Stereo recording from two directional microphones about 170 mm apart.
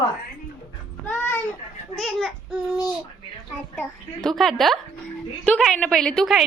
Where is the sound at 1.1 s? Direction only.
10° left (ahead or behind).